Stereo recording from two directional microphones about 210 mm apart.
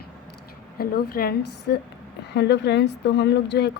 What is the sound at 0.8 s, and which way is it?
Speech, 45° left (ahead or behind).